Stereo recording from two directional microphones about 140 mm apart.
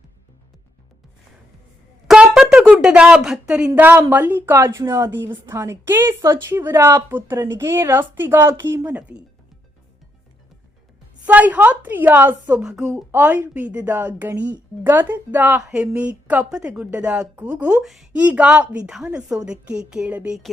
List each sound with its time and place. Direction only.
2.0 s a sound: 5° right (ahead or behind)
3.8 s a woman's voice: 15° right (ahead or behind)
11.3 s a woman's voice: 10° right (ahead or behind)
13.1 s a woman's voice: 15° right (ahead or behind)